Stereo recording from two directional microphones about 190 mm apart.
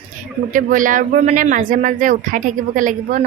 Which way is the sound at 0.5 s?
45° right (ahead or behind).